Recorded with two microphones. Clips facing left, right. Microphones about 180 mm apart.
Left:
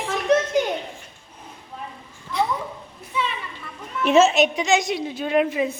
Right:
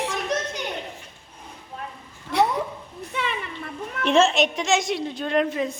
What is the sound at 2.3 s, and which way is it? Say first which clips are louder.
Cat: right 3 dB; 70° right (ahead or behind).